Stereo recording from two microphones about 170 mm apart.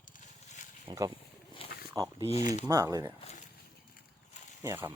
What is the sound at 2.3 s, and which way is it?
Speech, 45° left (ahead or behind).